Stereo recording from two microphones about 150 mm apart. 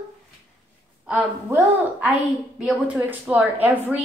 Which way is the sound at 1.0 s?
10° right (ahead or behind).